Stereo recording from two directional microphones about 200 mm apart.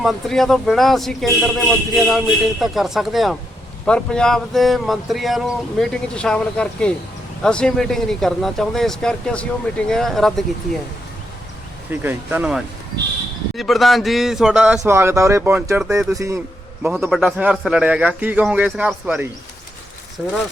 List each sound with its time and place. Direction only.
0.0 s a man's voice: centre (ahead or behind)
11.9 s a man's voice: 10° right (ahead or behind)
16.8 s a man's voice: 5° right (ahead or behind)